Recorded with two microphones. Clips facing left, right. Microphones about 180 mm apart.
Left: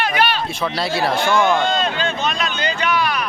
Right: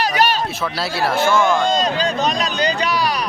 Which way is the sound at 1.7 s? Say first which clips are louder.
Right 2 dB; 40° right (ahead or behind).